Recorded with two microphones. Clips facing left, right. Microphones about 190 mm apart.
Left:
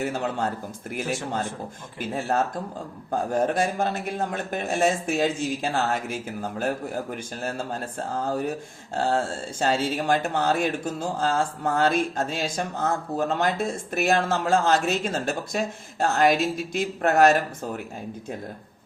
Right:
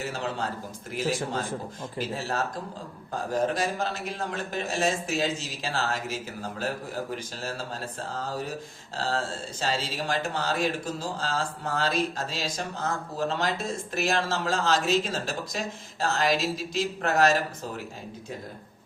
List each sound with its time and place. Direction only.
0.0 s a man's voice: 55° left (ahead or behind)